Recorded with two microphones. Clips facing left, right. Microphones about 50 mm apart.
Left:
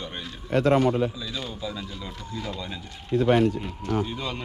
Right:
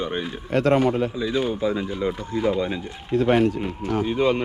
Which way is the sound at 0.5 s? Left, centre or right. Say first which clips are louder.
Right 2 dB; right.